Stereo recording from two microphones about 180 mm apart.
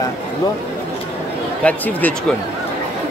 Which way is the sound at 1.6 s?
10° left (ahead or behind).